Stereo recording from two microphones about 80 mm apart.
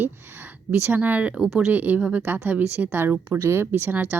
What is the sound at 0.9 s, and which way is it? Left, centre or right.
Speech, centre.